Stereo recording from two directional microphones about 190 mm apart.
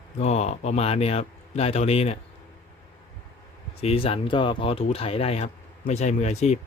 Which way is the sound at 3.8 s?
30° left (ahead or behind).